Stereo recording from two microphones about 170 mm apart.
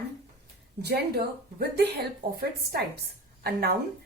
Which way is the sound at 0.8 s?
70° right (ahead or behind).